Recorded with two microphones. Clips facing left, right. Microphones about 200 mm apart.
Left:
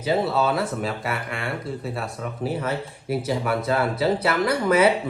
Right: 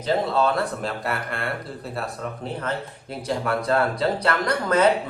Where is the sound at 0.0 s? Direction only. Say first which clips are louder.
Even; 5° left (ahead or behind).